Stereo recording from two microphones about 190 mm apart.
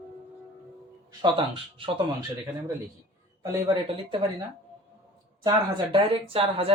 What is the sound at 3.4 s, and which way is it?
Speech, 20° right (ahead or behind).